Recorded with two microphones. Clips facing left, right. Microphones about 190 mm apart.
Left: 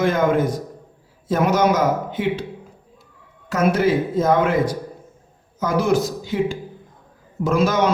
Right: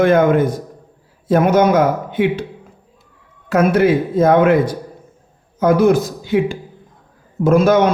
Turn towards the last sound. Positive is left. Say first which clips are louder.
# right 6 dB
turn(degrees=-55)  # may be behind; listen again after turning